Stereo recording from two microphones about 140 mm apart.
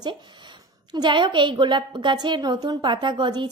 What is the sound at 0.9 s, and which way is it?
A woman's voice, 30° right (ahead or behind).